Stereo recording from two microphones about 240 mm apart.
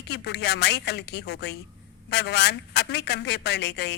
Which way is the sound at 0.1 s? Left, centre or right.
Left.